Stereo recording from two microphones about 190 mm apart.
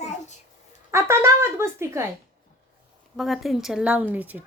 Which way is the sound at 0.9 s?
15° right (ahead or behind).